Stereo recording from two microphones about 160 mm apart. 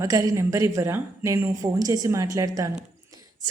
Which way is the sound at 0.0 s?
20° right (ahead or behind).